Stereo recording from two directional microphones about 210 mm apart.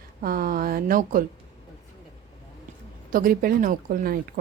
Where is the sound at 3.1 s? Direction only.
45° right (ahead or behind).